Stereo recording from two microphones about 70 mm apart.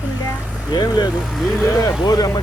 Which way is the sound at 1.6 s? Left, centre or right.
Left.